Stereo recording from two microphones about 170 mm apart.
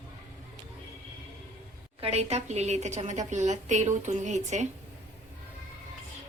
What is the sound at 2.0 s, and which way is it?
A woman's voice, 35° right (ahead or behind).